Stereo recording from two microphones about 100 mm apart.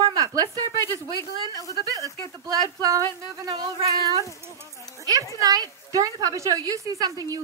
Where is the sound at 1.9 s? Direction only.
35° right (ahead or behind).